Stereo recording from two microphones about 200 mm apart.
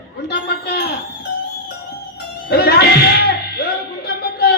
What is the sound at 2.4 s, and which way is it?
Music, 50° left (ahead or behind).